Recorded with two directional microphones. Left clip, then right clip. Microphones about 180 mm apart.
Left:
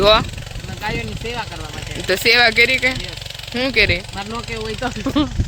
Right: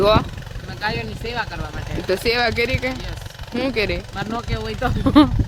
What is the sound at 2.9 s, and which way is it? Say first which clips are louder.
Jackhammer: left 6 dB; 45° right (ahead or behind).